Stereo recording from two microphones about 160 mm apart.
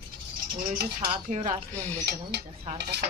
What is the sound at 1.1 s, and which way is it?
Speech, 45° right (ahead or behind).